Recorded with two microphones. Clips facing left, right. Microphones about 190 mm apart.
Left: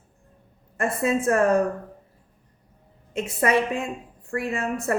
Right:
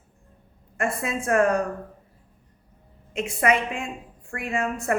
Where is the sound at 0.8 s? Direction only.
35° left (ahead or behind).